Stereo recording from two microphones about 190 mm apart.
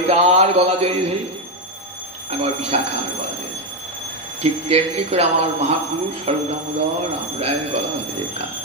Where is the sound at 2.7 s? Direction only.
30° right (ahead or behind).